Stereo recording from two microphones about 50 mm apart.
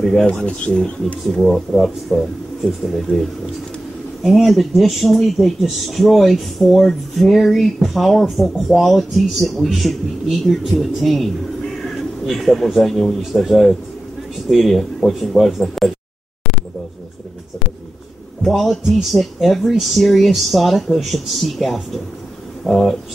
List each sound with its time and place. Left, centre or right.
0.0 s speech: centre
0.3 s speech: centre
1.2 s speech: centre
4.2 s speech: centre
18.4 s speech: centre